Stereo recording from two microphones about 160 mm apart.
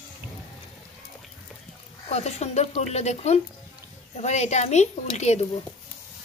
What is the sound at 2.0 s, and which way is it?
A woman's voice, 40° left (ahead or behind).